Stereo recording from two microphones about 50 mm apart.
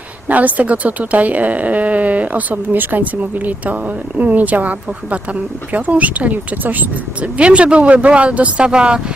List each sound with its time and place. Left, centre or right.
0.3 s a woman's voice: right
7.3 s speech: right